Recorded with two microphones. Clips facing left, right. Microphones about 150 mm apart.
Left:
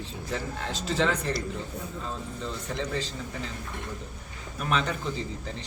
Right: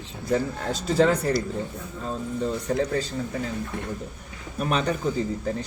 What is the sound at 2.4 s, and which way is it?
Speech, 45° right (ahead or behind).